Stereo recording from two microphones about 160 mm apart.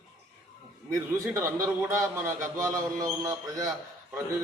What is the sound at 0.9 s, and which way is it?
A man's voice, 15° right (ahead or behind).